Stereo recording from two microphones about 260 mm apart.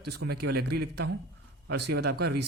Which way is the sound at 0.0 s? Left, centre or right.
Right.